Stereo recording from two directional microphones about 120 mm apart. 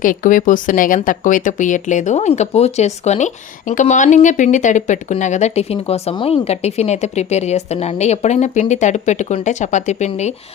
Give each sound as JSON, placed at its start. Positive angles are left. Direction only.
{"t": 0.2, "sound": "speech", "side_deg": 90}
{"t": 2.1, "sound": "speech", "side_deg": 70}
{"t": 5.2, "sound": "speech", "side_deg": 80}